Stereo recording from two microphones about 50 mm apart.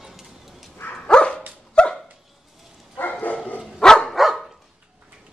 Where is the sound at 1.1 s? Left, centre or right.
Centre.